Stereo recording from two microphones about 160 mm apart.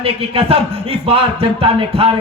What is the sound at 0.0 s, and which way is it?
A man's voice, 35° right (ahead or behind).